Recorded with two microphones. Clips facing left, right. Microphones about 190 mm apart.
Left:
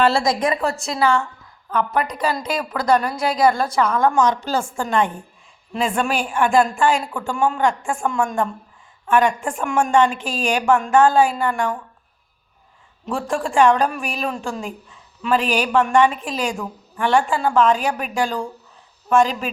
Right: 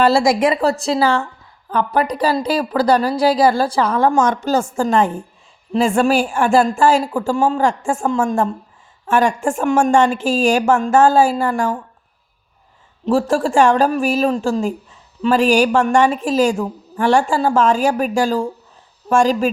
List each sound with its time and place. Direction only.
0.0 s a woman's voice: 35° right (ahead or behind)
4.2 s a woman's voice: 45° right (ahead or behind)
13.1 s a woman's voice: 40° right (ahead or behind)